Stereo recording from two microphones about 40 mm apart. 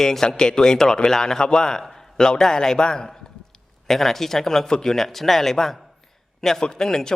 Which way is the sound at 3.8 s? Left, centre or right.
Centre.